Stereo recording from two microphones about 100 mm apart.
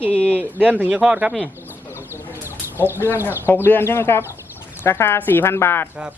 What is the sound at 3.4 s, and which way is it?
Speech, 20° left (ahead or behind).